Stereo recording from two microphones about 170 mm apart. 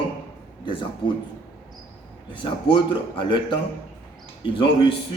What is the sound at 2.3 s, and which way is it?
Speech, 30° left (ahead or behind).